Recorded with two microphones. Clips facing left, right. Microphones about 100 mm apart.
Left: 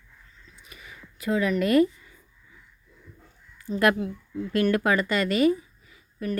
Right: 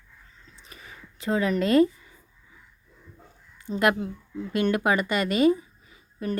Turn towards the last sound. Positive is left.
turn(degrees=-25)  # may be behind; listen again after turning